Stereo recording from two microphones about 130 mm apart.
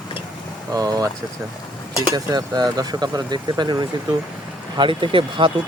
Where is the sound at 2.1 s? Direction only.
30° right (ahead or behind).